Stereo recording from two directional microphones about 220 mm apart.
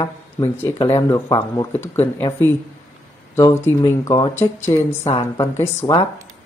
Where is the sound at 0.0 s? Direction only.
15° left (ahead or behind).